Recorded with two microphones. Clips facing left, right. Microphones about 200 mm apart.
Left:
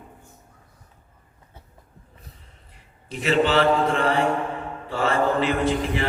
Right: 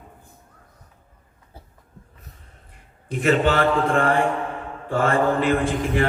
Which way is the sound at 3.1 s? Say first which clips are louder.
Right 2 dB; 50° right (ahead or behind).